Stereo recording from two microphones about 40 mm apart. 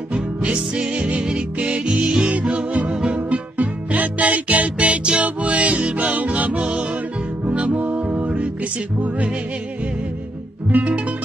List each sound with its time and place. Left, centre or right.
0.1 s music: right
10.7 s music: right